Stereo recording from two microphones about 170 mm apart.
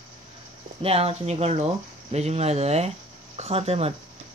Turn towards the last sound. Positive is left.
turn(degrees=-35)  # may be behind; listen again after turning